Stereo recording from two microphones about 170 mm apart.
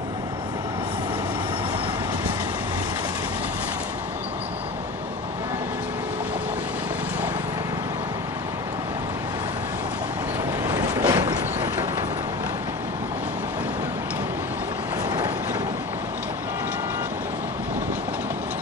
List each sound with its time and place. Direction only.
10.6 s vehicle: 25° right (ahead or behind)